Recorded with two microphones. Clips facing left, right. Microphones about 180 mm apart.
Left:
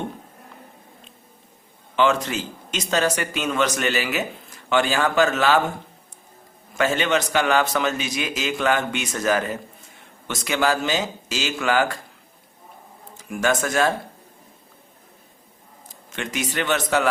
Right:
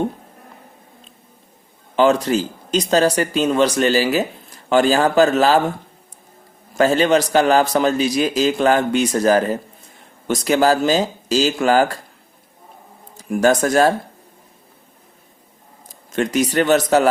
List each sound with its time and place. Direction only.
2.0 s speech: 35° right (ahead or behind)
6.7 s speech: 35° right (ahead or behind)
13.1 s speech: 35° right (ahead or behind)
16.1 s speech: 40° right (ahead or behind)